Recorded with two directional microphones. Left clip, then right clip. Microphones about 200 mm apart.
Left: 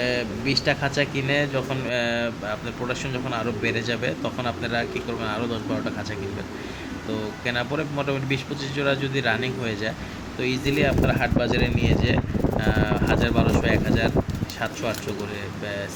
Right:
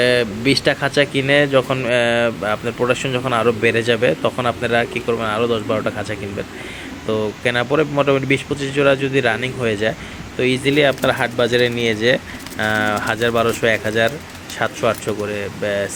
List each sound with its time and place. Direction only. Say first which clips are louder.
0.0 s speech: right 9 dB; 30° right (ahead or behind)
7.4 s speech: right 9 dB; 25° right (ahead or behind)